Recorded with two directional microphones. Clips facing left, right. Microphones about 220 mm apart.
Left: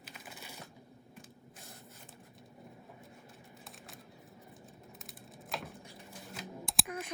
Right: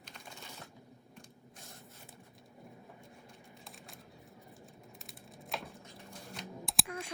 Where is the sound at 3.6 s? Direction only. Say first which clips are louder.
Even; centre (ahead or behind).